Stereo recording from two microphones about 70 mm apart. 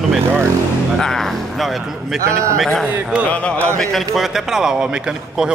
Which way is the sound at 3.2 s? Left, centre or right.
Centre.